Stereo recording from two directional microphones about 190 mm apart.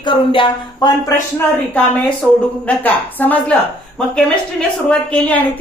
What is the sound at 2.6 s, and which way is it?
A woman's voice, 10° left (ahead or behind).